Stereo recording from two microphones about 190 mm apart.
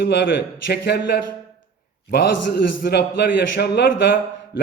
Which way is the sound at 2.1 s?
55° left (ahead or behind).